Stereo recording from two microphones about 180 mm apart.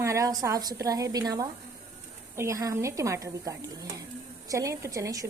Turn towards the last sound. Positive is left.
turn(degrees=-20)  # may be behind; listen again after turning